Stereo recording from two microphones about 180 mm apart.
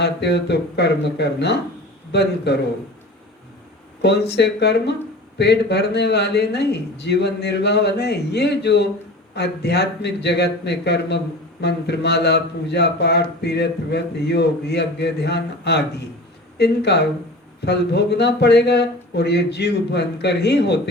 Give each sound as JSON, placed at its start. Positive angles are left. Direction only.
{"t": 0.0, "sound": "a man's voice", "side_deg": 70}
{"t": 4.0, "sound": "a man's voice", "side_deg": 65}